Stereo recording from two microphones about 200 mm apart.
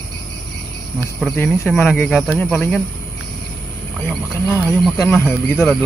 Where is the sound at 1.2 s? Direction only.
5° left (ahead or behind).